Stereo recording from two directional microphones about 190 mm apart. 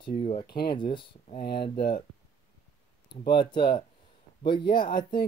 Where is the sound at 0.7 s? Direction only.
25° left (ahead or behind).